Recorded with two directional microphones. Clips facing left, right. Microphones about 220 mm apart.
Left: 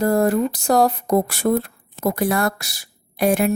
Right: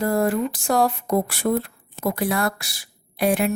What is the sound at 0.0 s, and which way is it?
Speech, 40° left (ahead or behind).